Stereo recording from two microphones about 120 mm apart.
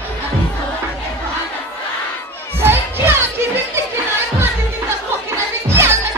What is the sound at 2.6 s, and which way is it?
Crowd, 20° right (ahead or behind).